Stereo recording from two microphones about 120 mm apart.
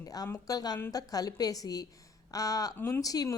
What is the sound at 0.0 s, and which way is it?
Speech, 30° left (ahead or behind).